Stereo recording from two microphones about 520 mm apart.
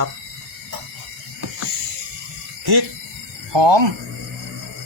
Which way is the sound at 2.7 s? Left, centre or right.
Right.